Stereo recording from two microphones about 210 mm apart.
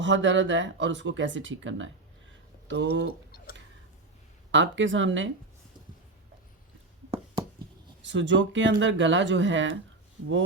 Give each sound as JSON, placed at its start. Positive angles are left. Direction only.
{"t": 0.0, "sound": "speech", "side_deg": -60}
{"t": 3.3, "sound": "tick", "side_deg": 45}
{"t": 4.5, "sound": "speech", "side_deg": -60}
{"t": 8.0, "sound": "speech", "side_deg": -60}